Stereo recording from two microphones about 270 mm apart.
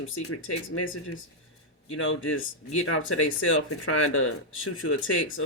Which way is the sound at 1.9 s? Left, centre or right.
Left.